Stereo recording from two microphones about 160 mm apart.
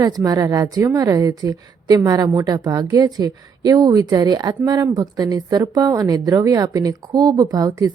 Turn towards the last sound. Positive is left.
turn(degrees=-25)  # may be behind; listen again after turning